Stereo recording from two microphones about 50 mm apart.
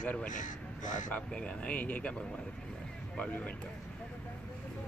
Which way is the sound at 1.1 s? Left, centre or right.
Left.